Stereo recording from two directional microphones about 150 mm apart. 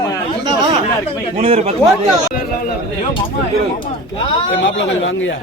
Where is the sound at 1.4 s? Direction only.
40° right (ahead or behind).